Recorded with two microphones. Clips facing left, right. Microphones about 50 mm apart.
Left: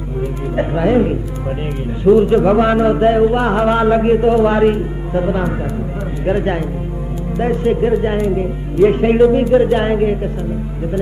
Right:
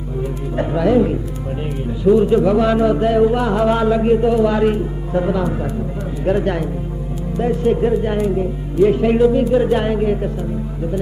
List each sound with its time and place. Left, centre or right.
0.2 s a man's voice: left